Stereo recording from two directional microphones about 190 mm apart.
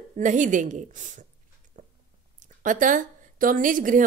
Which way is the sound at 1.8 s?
40° right (ahead or behind).